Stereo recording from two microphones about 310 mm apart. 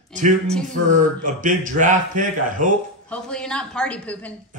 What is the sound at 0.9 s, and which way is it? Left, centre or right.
Speech, right.